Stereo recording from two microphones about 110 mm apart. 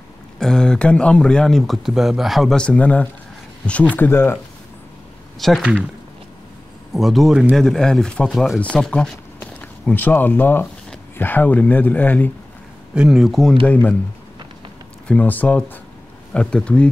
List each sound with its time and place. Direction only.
0.4 s speech: 5° left (ahead or behind)
5.4 s speech: 5° left (ahead or behind)
6.9 s speech: centre (ahead or behind)
9.4 s speech: 15° left (ahead or behind)
12.9 s speech: 5° right (ahead or behind)
13.7 s speech: 15° left (ahead or behind)
15.0 s speech: 15° left (ahead or behind)